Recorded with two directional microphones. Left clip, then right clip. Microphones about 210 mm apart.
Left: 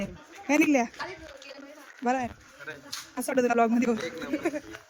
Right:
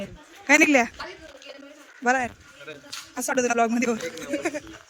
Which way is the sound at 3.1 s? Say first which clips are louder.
Right 2 dB; 5° left (ahead or behind).